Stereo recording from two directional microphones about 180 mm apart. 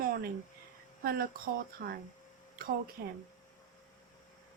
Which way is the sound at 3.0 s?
60° right (ahead or behind).